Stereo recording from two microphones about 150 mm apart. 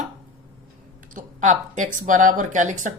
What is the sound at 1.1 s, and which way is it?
Speech, 55° right (ahead or behind).